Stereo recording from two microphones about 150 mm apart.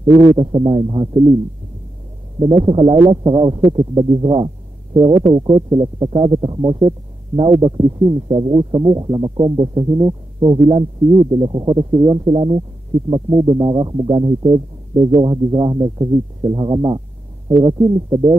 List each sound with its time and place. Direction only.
0.2 s speech: 30° right (ahead or behind)
2.4 s speech: 35° right (ahead or behind)